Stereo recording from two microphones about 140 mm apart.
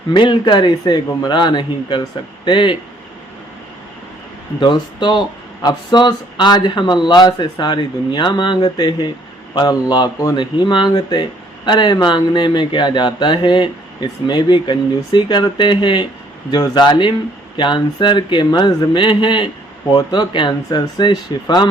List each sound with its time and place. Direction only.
0.1 s speech: 35° left (ahead or behind)
4.6 s speech: 35° left (ahead or behind)